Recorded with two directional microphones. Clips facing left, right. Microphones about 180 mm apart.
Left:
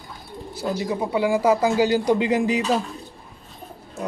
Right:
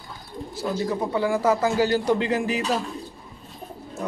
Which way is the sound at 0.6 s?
15° left (ahead or behind).